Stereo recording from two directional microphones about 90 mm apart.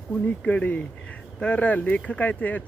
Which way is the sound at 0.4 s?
15° left (ahead or behind).